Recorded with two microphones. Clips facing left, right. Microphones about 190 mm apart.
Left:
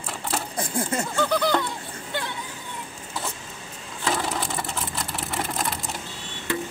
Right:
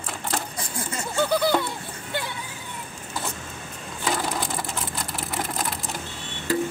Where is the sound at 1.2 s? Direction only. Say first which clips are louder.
Right 2 dB; 10° right (ahead or behind).